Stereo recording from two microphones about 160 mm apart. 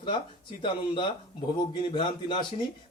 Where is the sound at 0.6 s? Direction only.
30° left (ahead or behind).